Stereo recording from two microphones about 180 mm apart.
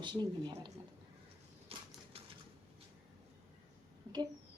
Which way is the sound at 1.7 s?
30° right (ahead or behind).